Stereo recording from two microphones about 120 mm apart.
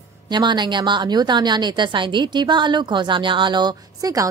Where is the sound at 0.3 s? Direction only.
40° right (ahead or behind).